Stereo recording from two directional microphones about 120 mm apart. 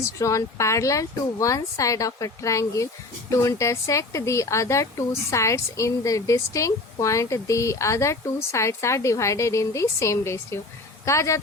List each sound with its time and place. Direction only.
0.0 s speech: 25° left (ahead or behind)